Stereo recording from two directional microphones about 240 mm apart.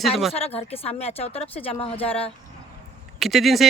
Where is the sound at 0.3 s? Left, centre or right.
Left.